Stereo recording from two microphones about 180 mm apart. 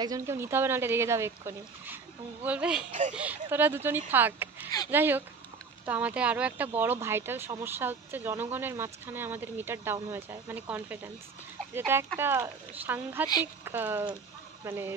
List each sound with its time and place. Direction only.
0.0 s speech: 15° right (ahead or behind)
2.9 s speech: 40° right (ahead or behind)
3.2 s speech: 10° right (ahead or behind)